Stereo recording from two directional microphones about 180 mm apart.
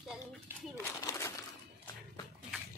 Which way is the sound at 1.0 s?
15° left (ahead or behind).